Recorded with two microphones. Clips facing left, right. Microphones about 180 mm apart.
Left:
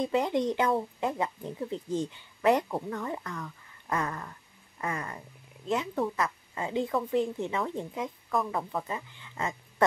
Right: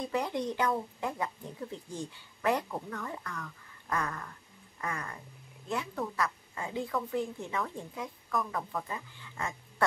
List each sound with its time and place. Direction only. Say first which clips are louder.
0.0 s a woman's voice: left 5 dB; 20° left (ahead or behind)